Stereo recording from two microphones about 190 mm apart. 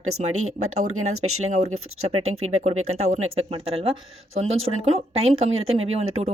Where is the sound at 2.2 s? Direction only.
90° right.